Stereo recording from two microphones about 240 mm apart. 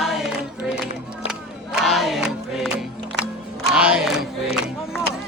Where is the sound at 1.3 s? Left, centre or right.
Centre.